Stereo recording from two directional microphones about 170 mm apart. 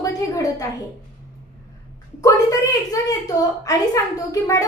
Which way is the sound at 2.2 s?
20° left (ahead or behind).